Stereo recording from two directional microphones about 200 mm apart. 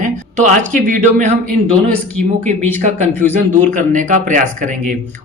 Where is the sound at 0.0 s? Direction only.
40° right (ahead or behind).